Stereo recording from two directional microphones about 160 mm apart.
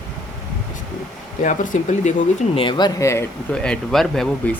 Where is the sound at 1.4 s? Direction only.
50° left (ahead or behind).